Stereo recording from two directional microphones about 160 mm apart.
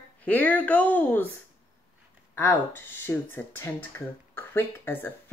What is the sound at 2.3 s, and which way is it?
Speech, 15° left (ahead or behind).